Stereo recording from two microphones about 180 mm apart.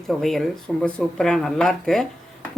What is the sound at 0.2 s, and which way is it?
Speech, centre (ahead or behind).